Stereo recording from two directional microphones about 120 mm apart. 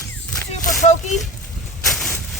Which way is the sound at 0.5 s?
85° left.